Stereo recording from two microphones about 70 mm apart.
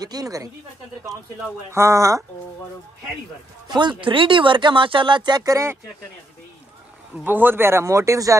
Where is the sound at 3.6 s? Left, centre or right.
Right.